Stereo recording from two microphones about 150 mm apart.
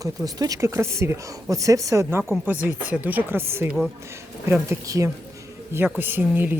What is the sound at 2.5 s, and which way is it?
Speech, 10° right (ahead or behind).